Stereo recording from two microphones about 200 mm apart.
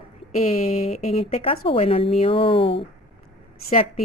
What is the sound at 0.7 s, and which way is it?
Speech, 30° left (ahead or behind).